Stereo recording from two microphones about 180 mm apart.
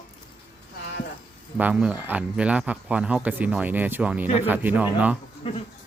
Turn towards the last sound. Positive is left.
turn(degrees=30)  # may be behind; listen again after turning